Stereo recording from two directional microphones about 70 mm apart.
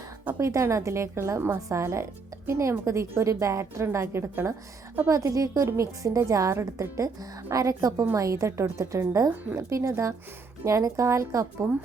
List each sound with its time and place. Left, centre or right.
0.4 s a woman's voice: right
5.0 s a woman's voice: right